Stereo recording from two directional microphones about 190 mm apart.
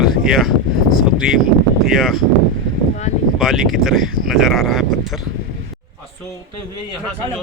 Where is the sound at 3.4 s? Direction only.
Centre (ahead or behind).